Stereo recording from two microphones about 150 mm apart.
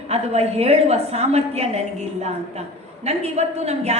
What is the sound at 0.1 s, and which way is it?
A woman's voice, 45° right (ahead or behind).